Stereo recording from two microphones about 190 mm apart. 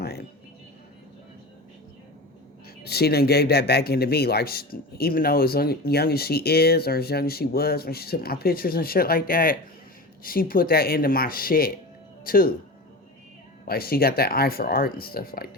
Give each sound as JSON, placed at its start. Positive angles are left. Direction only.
{"t": 0.0, "sound": "a sound", "side_deg": 60}
{"t": 2.8, "sound": "speech", "side_deg": 55}
{"t": 13.7, "sound": "speech", "side_deg": 50}